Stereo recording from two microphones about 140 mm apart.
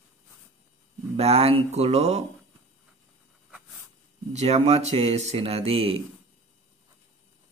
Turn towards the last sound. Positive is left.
turn(degrees=-40)  # may be behind; listen again after turning